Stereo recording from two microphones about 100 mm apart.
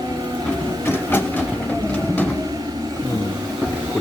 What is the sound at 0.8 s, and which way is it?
Printer, 20° left (ahead or behind).